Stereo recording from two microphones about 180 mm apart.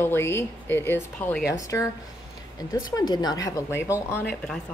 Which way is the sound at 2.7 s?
20° left (ahead or behind).